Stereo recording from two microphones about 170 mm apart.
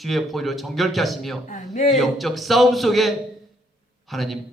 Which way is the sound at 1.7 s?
50° left (ahead or behind).